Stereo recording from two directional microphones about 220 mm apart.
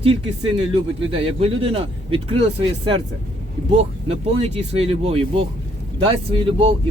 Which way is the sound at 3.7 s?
25° right (ahead or behind).